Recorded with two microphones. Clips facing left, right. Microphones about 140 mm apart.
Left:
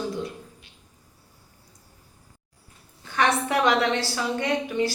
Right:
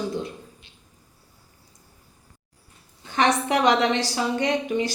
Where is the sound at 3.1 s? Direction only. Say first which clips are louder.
Right 2 dB; 20° right (ahead or behind).